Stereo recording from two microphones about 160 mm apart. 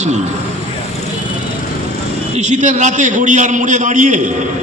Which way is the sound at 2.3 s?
45° right (ahead or behind).